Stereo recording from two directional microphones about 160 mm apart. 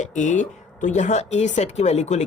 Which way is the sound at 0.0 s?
50° left (ahead or behind).